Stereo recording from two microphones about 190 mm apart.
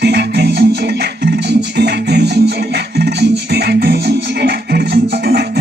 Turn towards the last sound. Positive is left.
turn(degrees=-60)  # may be behind; listen again after turning